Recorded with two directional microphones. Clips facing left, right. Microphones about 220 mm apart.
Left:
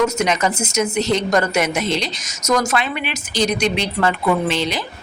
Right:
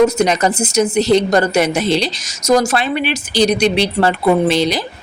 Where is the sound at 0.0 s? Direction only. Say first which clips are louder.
Right 5 dB; 35° right (ahead or behind).